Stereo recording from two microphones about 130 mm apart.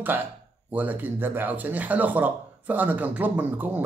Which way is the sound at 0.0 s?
15° right (ahead or behind).